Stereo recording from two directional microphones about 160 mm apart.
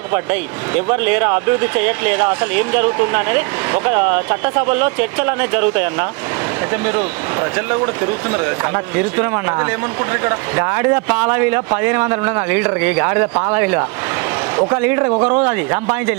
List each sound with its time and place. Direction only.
0.1 s speech: 10° right (ahead or behind)
7.5 s speech: 10° right (ahead or behind)